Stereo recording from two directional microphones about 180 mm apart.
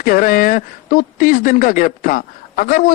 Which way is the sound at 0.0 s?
50° left (ahead or behind).